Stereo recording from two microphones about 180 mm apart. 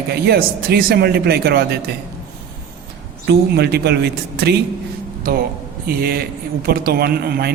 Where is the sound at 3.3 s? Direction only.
65° right (ahead or behind).